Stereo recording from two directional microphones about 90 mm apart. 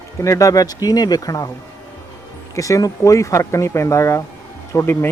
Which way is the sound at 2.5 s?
40° left (ahead or behind).